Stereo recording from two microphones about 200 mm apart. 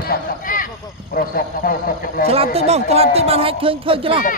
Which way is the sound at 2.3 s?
30° right (ahead or behind).